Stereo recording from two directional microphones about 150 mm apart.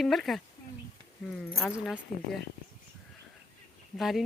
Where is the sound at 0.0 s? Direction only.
Centre (ahead or behind).